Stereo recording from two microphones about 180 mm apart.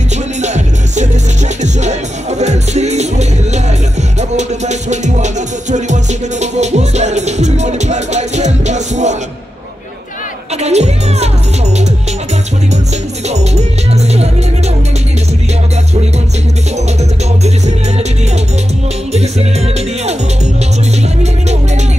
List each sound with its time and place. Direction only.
0.4 s music: 40° right (ahead or behind)
10.6 s music: 35° right (ahead or behind)
13.3 s music: 40° right (ahead or behind)
17.4 s music: 40° right (ahead or behind)